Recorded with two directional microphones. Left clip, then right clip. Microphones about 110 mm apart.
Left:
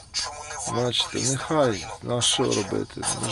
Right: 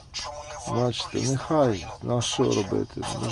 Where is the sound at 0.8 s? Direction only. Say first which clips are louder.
Left 3 dB; 45° right (ahead or behind).